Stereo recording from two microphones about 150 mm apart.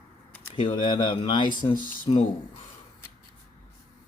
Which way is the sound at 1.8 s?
60° left (ahead or behind).